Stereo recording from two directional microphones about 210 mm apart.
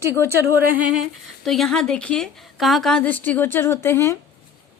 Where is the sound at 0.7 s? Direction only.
5° right (ahead or behind); by 4.1 s 10° left (ahead or behind).